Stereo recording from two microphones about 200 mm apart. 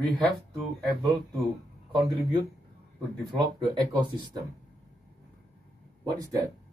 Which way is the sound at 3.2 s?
20° right (ahead or behind).